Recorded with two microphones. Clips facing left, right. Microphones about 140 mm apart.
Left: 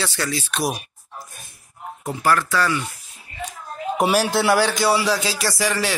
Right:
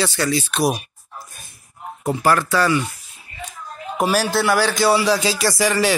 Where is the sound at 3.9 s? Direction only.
10° left (ahead or behind).